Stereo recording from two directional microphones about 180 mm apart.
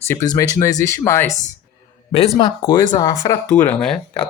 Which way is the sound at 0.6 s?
15° left (ahead or behind).